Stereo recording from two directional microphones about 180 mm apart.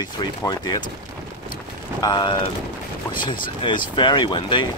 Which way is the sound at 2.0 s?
25° left (ahead or behind).